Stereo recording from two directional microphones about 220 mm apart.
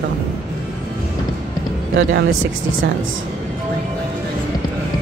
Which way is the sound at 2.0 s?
55° right (ahead or behind).